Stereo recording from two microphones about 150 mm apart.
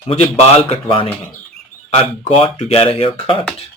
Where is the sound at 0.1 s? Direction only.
40° left (ahead or behind).